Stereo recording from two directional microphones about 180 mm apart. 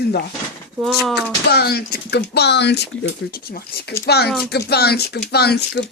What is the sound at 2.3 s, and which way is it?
Speech, 70° left (ahead or behind).